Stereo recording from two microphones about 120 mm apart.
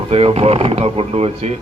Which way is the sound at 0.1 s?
55° right (ahead or behind).